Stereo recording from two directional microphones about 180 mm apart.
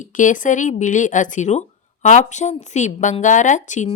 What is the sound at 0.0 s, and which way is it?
Speech, 45° left (ahead or behind).